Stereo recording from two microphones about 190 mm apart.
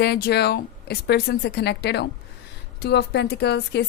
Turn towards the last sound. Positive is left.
turn(degrees=60)  # may be behind; listen again after turning